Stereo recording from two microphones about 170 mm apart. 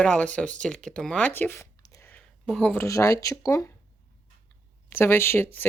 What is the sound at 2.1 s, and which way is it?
Speech, 5° left (ahead or behind).